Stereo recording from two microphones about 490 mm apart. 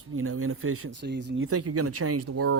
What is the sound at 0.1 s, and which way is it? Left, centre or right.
Speech, right.